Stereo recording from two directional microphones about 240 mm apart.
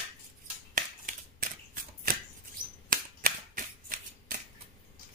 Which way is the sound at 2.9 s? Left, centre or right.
Right.